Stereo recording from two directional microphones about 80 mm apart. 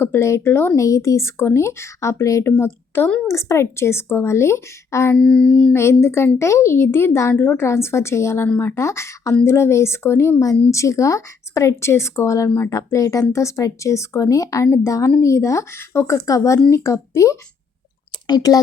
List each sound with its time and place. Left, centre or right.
0.0 s speech: left
0.8 s speech: left
5.1 s a sound: centre
5.7 s speech: left
16.1 s speech: left
18.3 s speech: left